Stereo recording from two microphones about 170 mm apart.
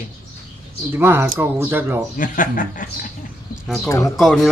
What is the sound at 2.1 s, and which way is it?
Speech, 50° left (ahead or behind).